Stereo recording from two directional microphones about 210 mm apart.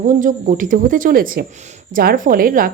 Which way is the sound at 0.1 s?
40° right (ahead or behind).